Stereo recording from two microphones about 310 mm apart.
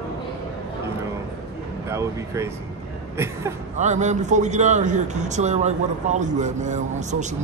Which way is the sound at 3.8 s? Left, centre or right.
Right.